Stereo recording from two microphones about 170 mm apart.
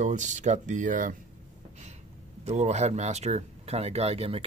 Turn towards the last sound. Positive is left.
turn(degrees=-35)  # may be behind; listen again after turning